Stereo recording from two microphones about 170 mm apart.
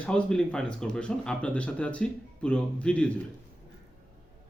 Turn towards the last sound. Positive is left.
turn(degrees=5)  # may be behind; listen again after turning